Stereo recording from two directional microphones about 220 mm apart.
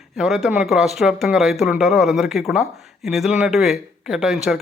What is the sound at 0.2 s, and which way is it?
Speech, centre (ahead or behind).